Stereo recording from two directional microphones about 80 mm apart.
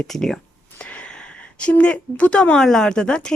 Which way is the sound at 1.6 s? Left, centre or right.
Centre.